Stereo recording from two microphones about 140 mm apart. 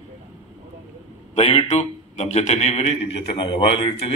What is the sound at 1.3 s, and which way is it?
A man's voice, 45° left (ahead or behind).